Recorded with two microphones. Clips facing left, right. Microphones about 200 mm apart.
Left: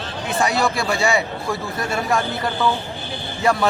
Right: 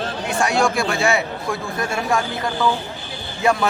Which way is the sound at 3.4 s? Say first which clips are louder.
Even; centre (ahead or behind).